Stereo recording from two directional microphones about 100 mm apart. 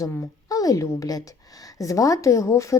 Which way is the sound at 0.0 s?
35° left (ahead or behind).